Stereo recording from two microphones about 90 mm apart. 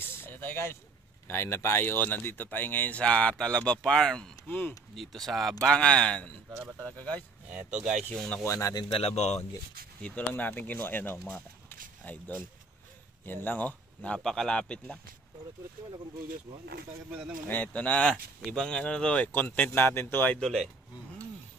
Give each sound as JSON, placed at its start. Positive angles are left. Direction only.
{"t": 0.0, "sound": "vehicle", "side_deg": 25}
{"t": 1.2, "sound": "speech", "side_deg": 30}
{"t": 4.5, "sound": "speech", "side_deg": 20}
{"t": 4.9, "sound": "speech", "side_deg": 0}
{"t": 7.4, "sound": "speech", "side_deg": -15}
{"t": 8.1, "sound": "speech", "side_deg": 5}
{"t": 8.5, "sound": "speech", "side_deg": 30}
{"t": 10.0, "sound": "speech", "side_deg": 20}
{"t": 14.2, "sound": "speech", "side_deg": 5}
{"t": 17.5, "sound": "speech", "side_deg": 20}
{"t": 18.5, "sound": "speech", "side_deg": 5}
{"t": 20.3, "sound": "speech", "side_deg": 5}